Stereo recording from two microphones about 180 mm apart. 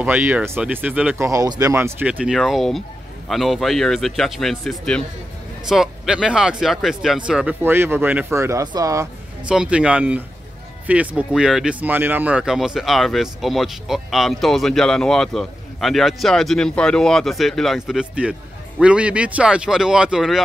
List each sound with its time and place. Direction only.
0.0 s speech: 10° right (ahead or behind)
9.5 s speech: 5° right (ahead or behind)